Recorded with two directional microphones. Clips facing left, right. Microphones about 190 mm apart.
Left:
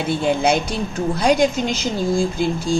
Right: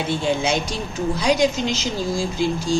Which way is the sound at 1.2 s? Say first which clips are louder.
Left 3 dB; 55° left (ahead or behind).